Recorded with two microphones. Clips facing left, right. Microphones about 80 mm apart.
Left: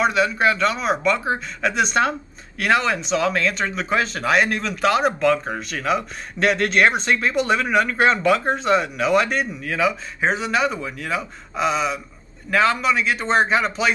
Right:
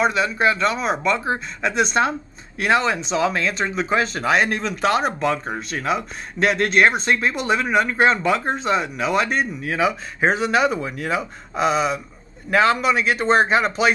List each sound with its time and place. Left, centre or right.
0.0 s speech: right
6.4 s a man's voice: right
11.6 s a sound: right
12.4 s a man's voice: right